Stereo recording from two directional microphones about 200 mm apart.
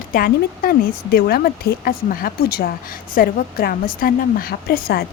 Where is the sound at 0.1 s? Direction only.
45° left (ahead or behind).